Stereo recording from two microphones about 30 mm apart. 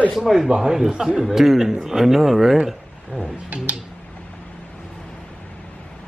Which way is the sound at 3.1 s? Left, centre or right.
Left.